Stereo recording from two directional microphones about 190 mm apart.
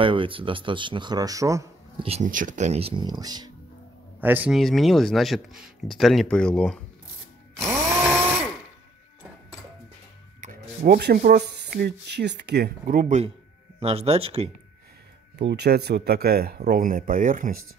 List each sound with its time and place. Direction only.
0.0 s speech: 25° right (ahead or behind)
2.0 s speech: 40° right (ahead or behind); by 3.5 s 20° right (ahead or behind)
4.2 s speech: 10° right (ahead or behind)
7.5 s tools: 15° right (ahead or behind)
10.4 s speech: 50° right (ahead or behind); by 14.5 s 30° right (ahead or behind)
15.3 s speech: 60° right (ahead or behind)